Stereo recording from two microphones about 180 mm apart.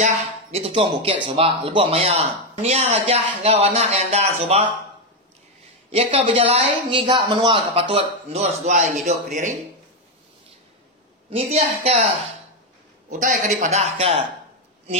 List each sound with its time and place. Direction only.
0.0 s speech: 35° right (ahead or behind)
5.9 s speech: 35° right (ahead or behind)
11.2 s speech: 35° right (ahead or behind)